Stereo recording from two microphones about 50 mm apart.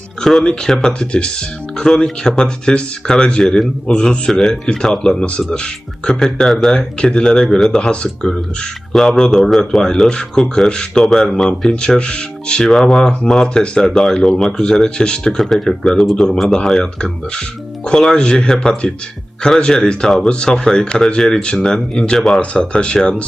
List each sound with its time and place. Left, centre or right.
0.4 s speech: centre
6.5 s speech: centre
7.0 s speech: centre
7.3 s speech: centre
7.8 s speech: centre
11.7 s speech: centre
18.2 s speech: centre